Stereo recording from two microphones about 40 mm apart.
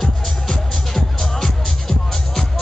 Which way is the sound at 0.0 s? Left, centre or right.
Centre.